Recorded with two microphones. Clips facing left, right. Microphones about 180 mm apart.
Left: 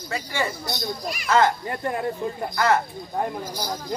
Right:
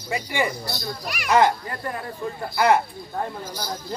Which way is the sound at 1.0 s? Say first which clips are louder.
Left 1 dB; 70° right (ahead or behind).